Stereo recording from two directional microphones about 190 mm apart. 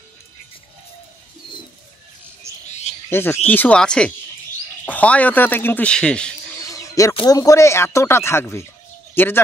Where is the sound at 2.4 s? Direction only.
15° right (ahead or behind).